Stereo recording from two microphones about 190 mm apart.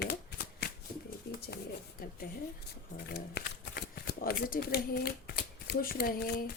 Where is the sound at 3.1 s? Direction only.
55° left (ahead or behind).